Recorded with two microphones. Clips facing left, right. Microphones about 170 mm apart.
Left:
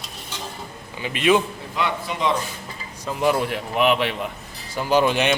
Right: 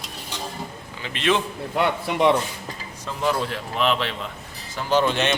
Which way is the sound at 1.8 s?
60° right (ahead or behind).